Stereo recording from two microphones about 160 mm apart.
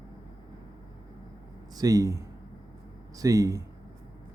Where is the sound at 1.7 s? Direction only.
20° right (ahead or behind).